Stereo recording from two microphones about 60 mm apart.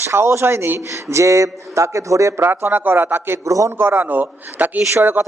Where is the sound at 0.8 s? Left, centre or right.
Right.